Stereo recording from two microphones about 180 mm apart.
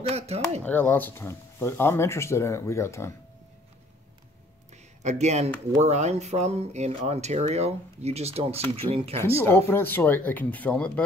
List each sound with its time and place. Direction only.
0.1 s speech: 35° right (ahead or behind)
0.7 s speech: 10° left (ahead or behind)
5.0 s speech: 40° right (ahead or behind)
9.4 s speech: 10° left (ahead or behind)